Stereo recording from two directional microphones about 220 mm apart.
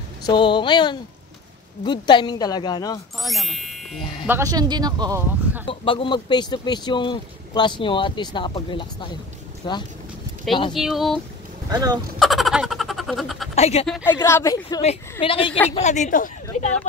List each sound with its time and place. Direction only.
0.2 s speech: 20° left (ahead or behind)
3.2 s a sound: centre (ahead or behind)
4.3 s speech: 15° right (ahead or behind)
5.7 s speech: 25° left (ahead or behind)
10.7 s speech: centre (ahead or behind)
11.7 s speech: 20° right (ahead or behind)
12.2 s a sound: centre (ahead or behind)
13.6 s speech: 30° left (ahead or behind)
13.8 s speech: centre (ahead or behind)
14.1 s speech: 15° left (ahead or behind)
14.8 s a woman's voice: 25° left (ahead or behind)